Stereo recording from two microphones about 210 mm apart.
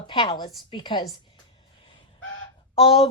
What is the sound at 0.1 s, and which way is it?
Speech, 20° left (ahead or behind).